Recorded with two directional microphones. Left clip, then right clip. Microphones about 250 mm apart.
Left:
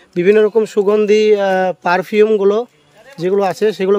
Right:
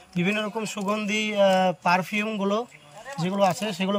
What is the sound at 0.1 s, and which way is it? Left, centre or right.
Speech, left.